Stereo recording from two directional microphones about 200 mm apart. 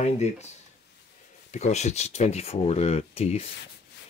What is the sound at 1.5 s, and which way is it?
Speech, 35° left (ahead or behind).